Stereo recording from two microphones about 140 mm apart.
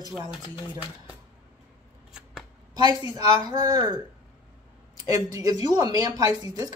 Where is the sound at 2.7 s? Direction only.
30° right (ahead or behind).